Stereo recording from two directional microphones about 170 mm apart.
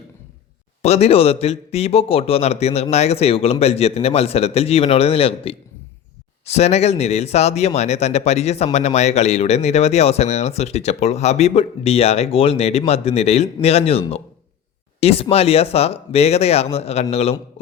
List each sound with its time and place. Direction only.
0.8 s speech: 40° left (ahead or behind)
15.0 s speech: 35° left (ahead or behind)